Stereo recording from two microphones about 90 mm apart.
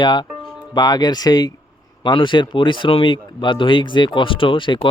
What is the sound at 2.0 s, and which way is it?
Speech, 60° left (ahead or behind).